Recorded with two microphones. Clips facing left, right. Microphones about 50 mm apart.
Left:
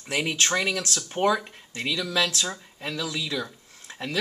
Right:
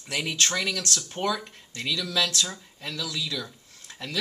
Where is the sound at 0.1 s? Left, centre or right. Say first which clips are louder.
Left 2 dB; centre.